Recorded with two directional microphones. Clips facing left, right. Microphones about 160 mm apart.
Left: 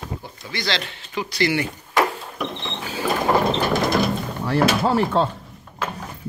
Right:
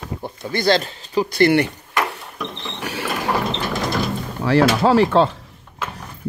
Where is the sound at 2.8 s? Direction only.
70° right (ahead or behind).